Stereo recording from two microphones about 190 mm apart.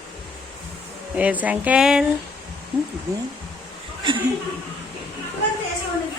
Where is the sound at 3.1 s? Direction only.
15° right (ahead or behind).